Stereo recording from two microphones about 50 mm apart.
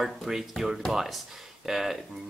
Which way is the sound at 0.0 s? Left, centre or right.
Centre.